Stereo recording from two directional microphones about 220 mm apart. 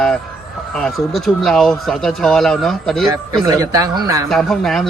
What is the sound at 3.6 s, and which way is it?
Speech, 15° right (ahead or behind).